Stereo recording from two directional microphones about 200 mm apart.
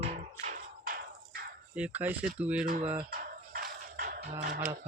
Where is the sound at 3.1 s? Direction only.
45° right (ahead or behind).